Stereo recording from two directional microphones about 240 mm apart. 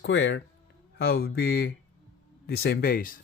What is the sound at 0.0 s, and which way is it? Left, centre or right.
Speech, left.